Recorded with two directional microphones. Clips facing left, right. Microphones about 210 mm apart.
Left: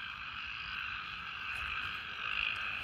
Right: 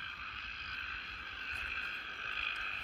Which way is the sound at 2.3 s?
50° right (ahead or behind).